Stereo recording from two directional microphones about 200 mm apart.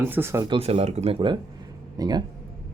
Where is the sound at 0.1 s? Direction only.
10° right (ahead or behind).